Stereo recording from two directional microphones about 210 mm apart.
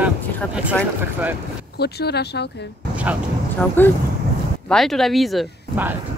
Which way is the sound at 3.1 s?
5° right (ahead or behind).